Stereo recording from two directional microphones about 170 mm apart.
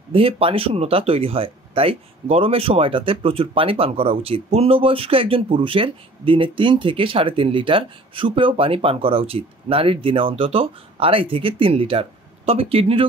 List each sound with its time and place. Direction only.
0.1 s speech: 35° right (ahead or behind)